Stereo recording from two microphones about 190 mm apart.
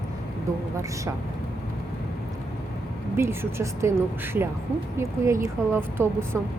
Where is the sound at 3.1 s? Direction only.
15° right (ahead or behind).